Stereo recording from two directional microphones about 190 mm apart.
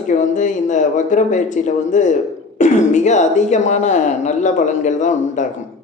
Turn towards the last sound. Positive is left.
turn(degrees=40)  # may be behind; listen again after turning